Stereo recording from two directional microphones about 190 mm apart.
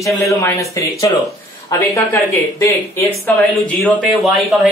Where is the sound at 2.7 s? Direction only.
15° left (ahead or behind).